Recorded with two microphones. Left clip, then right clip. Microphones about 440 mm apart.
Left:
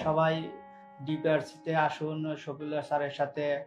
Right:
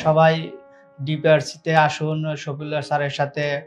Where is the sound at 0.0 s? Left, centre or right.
Right.